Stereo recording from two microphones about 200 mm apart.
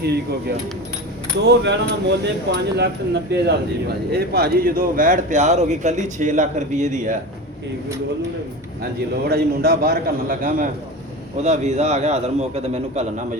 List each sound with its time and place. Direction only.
1.4 s speech: 60° right (ahead or behind); by 7.2 s 40° right (ahead or behind)
8.8 s a man's voice: 50° right (ahead or behind); by 13.1 s 30° right (ahead or behind)